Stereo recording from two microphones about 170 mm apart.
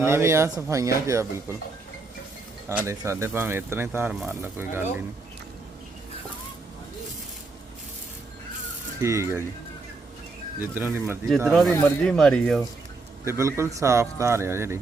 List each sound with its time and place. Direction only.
0.0 s speech: 15° right (ahead or behind)
2.6 s speech: 15° right (ahead or behind)
9.0 s speech: 15° right (ahead or behind)
10.8 s speech: 15° right (ahead or behind)
11.4 s speech: centre (ahead or behind)
13.2 s speech: 15° right (ahead or behind)